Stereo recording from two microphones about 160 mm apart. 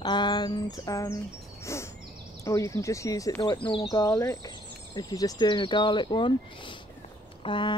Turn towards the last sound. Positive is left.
turn(degrees=30)  # may be behind; listen again after turning